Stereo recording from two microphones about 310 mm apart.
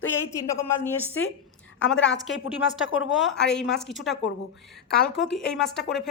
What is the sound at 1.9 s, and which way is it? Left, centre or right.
Speech, left.